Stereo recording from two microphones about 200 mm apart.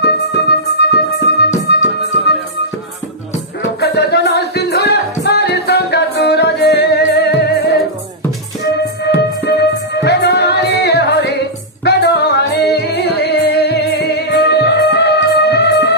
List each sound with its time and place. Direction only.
0.0 s music: 55° left (ahead or behind)
3.8 s music: 55° left (ahead or behind)
9.0 s music: 55° left (ahead or behind)